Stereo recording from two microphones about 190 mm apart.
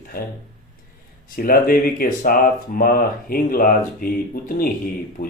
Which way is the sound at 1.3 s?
50° left (ahead or behind).